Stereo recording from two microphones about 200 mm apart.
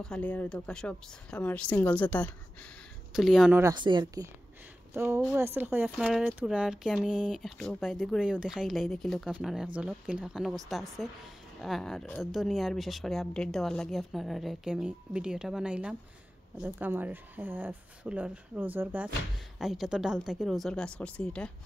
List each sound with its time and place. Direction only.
0.0 s speech: 5° left (ahead or behind)
3.6 s speech: 20° right (ahead or behind); by 21.5 s 5° left (ahead or behind)